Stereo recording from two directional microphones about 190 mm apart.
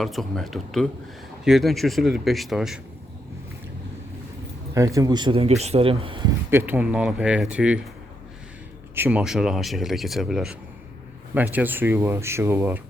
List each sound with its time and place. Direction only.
0.0 s speech: centre (ahead or behind)
4.7 s speech: 15° right (ahead or behind)
6.5 s speech: 10° right (ahead or behind)
9.0 s speech: 5° right (ahead or behind)